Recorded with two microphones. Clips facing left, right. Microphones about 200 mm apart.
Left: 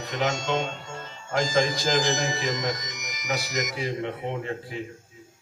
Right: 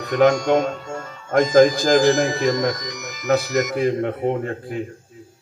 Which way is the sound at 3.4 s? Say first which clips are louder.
Right 9 dB; 15° left (ahead or behind).